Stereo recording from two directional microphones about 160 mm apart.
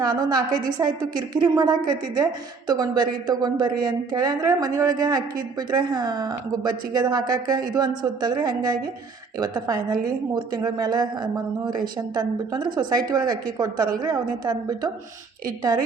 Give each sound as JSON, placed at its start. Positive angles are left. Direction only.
{"t": 0.0, "sound": "a woman's voice", "side_deg": -25}